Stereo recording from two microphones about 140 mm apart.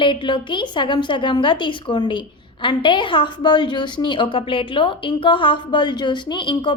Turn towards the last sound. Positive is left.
turn(degrees=35)  # may be behind; listen again after turning